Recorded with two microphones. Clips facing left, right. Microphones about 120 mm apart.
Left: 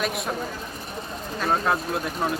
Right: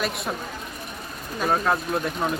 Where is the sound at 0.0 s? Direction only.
Centre (ahead or behind).